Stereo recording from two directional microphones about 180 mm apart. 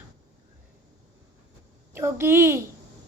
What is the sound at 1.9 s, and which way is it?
Speech, 15° right (ahead or behind).